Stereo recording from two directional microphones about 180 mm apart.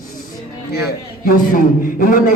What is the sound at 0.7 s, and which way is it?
Speech, 60° left (ahead or behind).